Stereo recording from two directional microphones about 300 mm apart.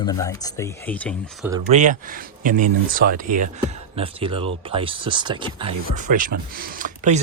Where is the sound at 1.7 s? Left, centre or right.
Right.